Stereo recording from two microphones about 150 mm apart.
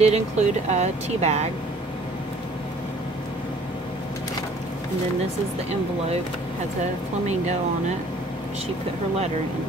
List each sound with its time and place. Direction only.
0.0 s speech: 50° right (ahead or behind)